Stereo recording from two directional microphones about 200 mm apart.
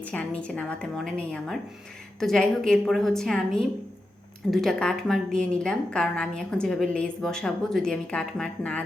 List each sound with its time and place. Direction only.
0.0 s a woman's voice: 5° left (ahead or behind)